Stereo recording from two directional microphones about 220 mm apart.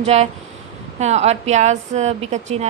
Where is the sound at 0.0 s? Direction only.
30° right (ahead or behind).